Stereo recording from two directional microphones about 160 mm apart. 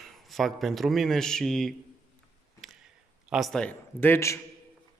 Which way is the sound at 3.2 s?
Centre (ahead or behind).